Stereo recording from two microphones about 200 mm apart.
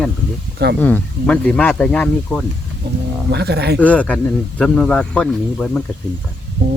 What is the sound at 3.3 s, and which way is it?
Speech, 55° right (ahead or behind).